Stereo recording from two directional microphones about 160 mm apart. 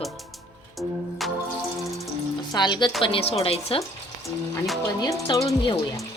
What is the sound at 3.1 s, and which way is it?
Speech, 40° left (ahead or behind).